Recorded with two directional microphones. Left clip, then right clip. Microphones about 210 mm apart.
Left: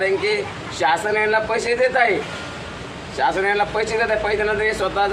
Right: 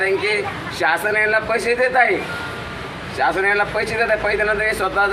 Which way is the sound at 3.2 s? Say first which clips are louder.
Right 1 dB; 5° right (ahead or behind).